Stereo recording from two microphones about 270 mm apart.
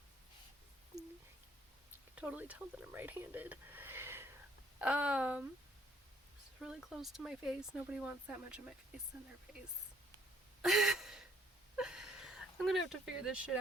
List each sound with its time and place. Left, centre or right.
2.1 s speech: centre
6.6 s speech: centre
10.6 s gasp: centre
11.8 s a sound: centre